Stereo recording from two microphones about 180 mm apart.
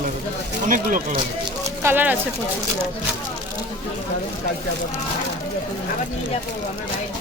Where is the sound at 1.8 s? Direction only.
10° right (ahead or behind).